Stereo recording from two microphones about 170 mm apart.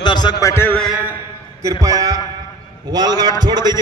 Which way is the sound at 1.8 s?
20° right (ahead or behind).